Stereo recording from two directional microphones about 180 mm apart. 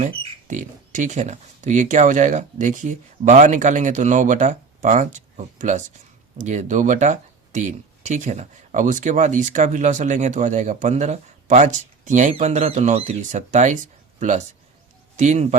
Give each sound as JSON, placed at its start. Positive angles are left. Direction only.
{"t": 0.4, "sound": "speech", "side_deg": -45}